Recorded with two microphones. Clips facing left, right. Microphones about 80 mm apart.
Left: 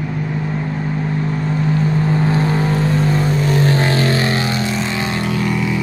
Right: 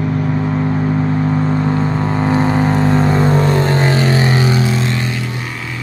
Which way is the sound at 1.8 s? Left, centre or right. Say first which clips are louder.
Right 1 dB; right.